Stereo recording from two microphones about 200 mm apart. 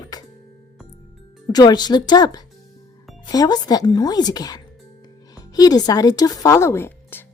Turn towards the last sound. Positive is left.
turn(degrees=10)  # may be behind; listen again after turning